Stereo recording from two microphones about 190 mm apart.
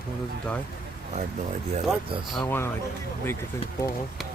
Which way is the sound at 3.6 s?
30° left (ahead or behind).